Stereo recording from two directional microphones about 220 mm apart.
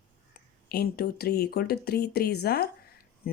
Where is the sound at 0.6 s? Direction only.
45° left (ahead or behind).